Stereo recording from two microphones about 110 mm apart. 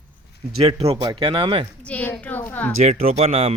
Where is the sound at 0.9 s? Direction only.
40° right (ahead or behind).